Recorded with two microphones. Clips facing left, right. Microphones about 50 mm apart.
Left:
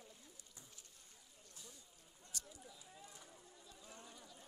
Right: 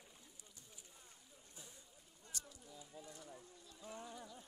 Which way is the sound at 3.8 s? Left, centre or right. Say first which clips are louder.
Right 9 dB; centre.